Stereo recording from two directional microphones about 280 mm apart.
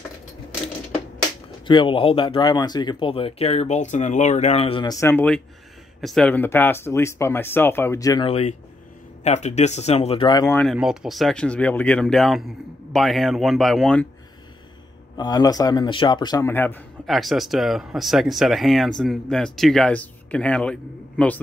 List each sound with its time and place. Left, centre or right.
1.7 s speech: centre
15.1 s speech: centre